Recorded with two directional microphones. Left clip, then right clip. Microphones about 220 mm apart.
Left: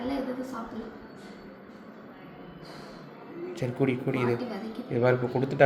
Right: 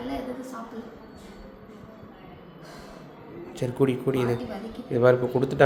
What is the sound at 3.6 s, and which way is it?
Speech, 25° right (ahead or behind).